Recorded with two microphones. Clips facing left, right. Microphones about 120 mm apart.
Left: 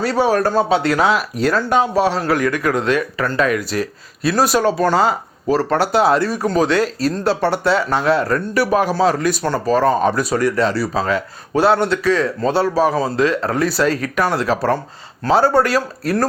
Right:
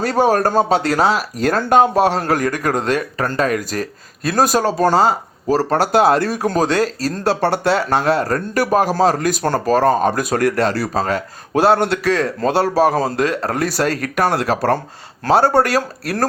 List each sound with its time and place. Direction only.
0.0 s speech: 45° right (ahead or behind)
11.9 s speech: 65° right (ahead or behind)
12.2 s speech: 50° right (ahead or behind)